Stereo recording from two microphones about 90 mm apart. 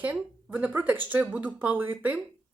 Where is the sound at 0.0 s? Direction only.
15° right (ahead or behind).